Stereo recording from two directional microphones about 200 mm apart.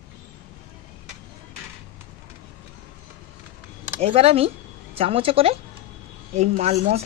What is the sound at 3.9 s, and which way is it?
Speech, 30° right (ahead or behind).